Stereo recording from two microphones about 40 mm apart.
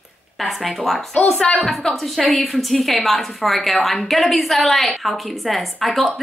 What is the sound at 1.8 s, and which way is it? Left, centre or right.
A woman's voice, centre.